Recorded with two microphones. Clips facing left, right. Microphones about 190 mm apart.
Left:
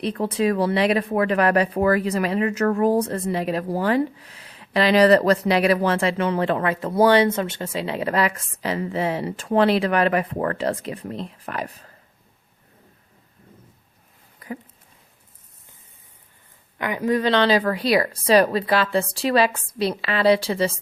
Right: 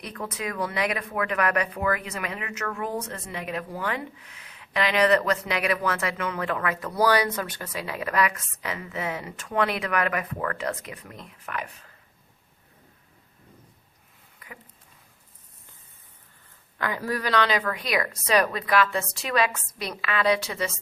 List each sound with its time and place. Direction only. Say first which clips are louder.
0.0 s speech: left 11 dB; 30° left (ahead or behind)
14.3 s a sound: left 13 dB; 35° left (ahead or behind)
16.7 s speech: left 7 dB; 20° left (ahead or behind)